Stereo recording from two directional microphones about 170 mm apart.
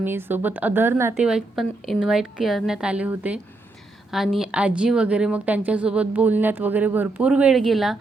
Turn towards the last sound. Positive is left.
turn(degrees=0)  # may be behind; listen again after turning